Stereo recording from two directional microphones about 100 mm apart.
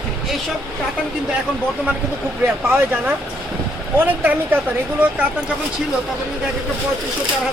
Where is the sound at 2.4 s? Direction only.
20° right (ahead or behind).